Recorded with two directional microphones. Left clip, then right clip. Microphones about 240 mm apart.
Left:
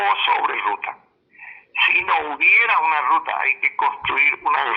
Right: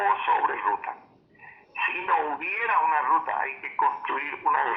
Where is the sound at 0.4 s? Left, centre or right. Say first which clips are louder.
Left 4 dB; left.